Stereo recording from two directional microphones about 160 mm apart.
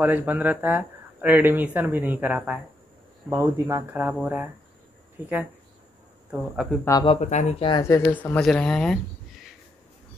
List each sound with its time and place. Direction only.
0.0 s speech: 10° right (ahead or behind)
3.3 s speech: 20° right (ahead or behind)
6.3 s speech: centre (ahead or behind)
6.8 s speech: 20° left (ahead or behind)
7.1 s speech: 45° left (ahead or behind)
7.6 s speech: 30° left (ahead or behind)
8.0 s speech: 10° left (ahead or behind)